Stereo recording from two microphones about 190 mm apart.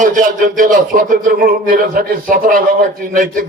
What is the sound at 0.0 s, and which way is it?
A man's voice, 45° right (ahead or behind).